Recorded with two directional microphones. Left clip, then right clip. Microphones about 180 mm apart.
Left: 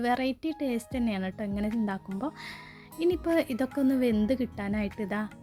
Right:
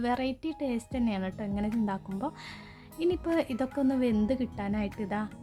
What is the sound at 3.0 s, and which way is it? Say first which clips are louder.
A woman's voice: left 2 dB; 20° left (ahead or behind).